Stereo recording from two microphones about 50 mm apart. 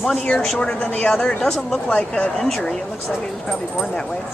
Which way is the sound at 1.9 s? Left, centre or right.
Left.